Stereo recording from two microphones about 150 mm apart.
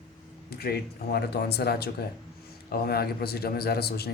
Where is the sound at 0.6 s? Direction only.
90° left.